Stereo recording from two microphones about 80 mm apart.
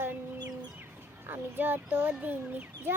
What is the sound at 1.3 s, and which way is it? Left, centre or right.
Child singing, right.